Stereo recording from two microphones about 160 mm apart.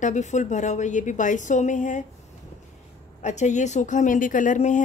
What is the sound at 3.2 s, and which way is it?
A woman's voice, 45° left (ahead or behind).